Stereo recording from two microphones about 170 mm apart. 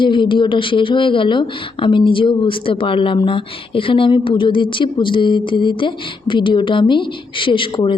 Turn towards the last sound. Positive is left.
turn(degrees=30)  # may be behind; listen again after turning